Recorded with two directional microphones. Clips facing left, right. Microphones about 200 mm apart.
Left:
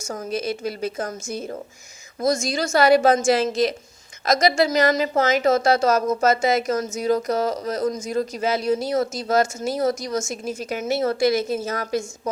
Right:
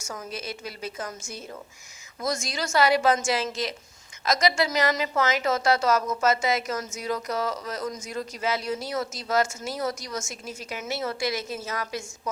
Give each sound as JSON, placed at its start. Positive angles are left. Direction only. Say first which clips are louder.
{"t": 0.3, "sound": "speech", "louder": "left 13 dB", "side_deg": 50}